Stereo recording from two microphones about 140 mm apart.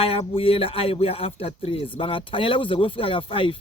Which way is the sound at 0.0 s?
40° left (ahead or behind).